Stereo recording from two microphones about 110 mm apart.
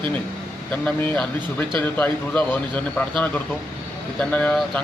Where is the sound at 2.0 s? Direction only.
10° left (ahead or behind).